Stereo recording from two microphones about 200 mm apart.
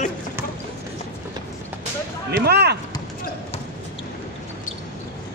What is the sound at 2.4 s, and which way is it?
Speech, 55° right (ahead or behind).